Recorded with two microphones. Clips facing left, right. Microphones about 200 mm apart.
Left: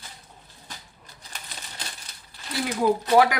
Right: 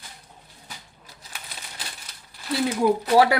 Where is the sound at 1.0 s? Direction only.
5° right (ahead or behind).